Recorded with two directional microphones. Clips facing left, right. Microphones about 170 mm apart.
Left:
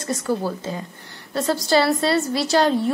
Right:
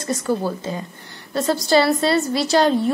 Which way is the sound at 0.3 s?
20° right (ahead or behind).